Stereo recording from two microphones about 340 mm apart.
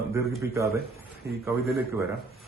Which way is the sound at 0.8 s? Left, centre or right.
Right.